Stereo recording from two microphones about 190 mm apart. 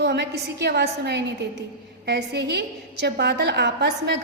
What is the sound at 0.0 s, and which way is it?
A woman's voice, 60° right (ahead or behind).